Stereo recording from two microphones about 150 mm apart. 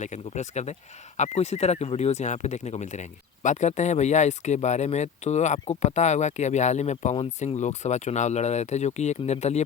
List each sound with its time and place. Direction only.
0.0 s speech: 50° left (ahead or behind)